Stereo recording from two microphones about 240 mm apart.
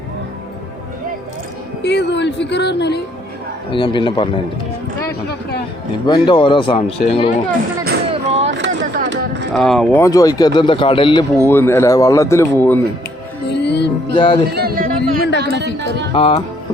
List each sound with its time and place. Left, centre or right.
1.8 s speech: left
3.7 s speech: centre
6.1 s speech: centre
8.1 s vehicle: right
8.4 s a sound: right
9.5 s speech: centre
13.5 s music: left
14.1 s speech: left
14.5 s a sound: right
15.2 s a sound: left
15.5 s a sound: right
16.1 s speech: left